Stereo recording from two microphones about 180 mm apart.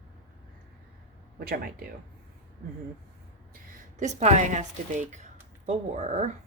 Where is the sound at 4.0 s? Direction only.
40° right (ahead or behind).